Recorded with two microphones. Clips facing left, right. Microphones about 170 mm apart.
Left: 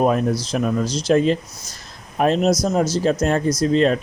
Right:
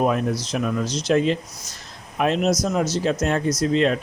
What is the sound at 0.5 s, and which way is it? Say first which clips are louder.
Speech: left 3 dB; 35° left (ahead or behind).